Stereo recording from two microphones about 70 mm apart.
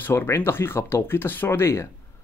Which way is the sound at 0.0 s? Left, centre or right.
Left.